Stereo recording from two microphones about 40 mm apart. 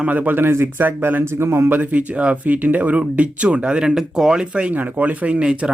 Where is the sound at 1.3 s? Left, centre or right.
Right.